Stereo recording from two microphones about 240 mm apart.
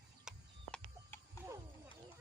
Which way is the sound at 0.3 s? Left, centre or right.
Centre.